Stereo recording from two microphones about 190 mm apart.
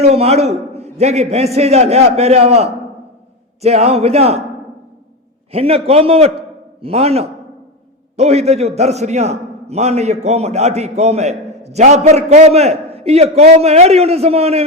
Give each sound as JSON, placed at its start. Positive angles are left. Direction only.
{"t": 0.0, "sound": "a man's voice", "side_deg": -35}
{"t": 5.5, "sound": "a man's voice", "side_deg": -30}